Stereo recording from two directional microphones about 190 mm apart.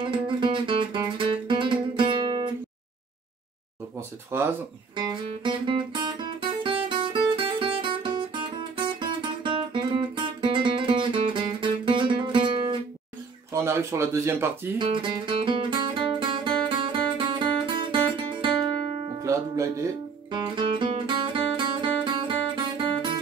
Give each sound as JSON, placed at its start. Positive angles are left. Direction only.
{"t": 0.0, "sound": "music", "side_deg": -25}
{"t": 4.3, "sound": "speech", "side_deg": -15}
{"t": 4.9, "sound": "music", "side_deg": -25}
{"t": 13.5, "sound": "speech", "side_deg": -15}
{"t": 14.8, "sound": "music", "side_deg": -25}